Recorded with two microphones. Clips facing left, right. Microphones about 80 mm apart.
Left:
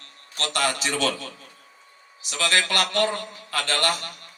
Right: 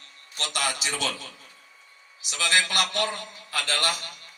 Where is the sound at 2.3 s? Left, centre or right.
Left.